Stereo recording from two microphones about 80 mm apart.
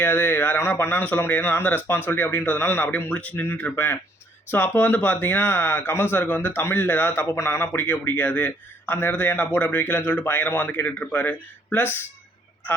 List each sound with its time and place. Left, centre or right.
0.0 s speech: left